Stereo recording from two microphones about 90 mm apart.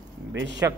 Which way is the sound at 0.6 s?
30° right (ahead or behind).